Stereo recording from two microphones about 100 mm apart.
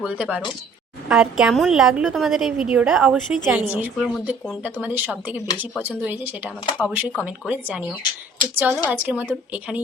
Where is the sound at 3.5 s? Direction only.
15° right (ahead or behind).